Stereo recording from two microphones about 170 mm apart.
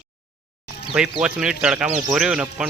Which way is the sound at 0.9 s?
5° right (ahead or behind).